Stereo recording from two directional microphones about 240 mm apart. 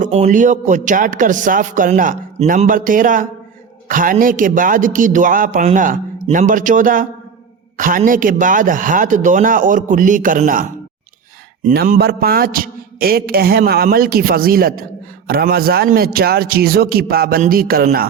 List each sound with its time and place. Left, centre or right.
0.0 s a man's voice: right